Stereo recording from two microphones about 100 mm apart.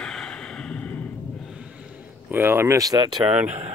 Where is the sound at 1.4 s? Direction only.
5° right (ahead or behind).